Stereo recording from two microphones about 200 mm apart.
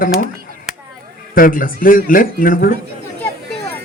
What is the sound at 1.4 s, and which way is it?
A man's voice, 45° left (ahead or behind).